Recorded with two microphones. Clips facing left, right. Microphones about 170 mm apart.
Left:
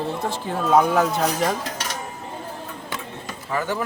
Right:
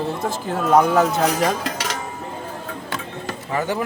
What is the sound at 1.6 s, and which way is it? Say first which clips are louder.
Music: right 4 dB; 80° right.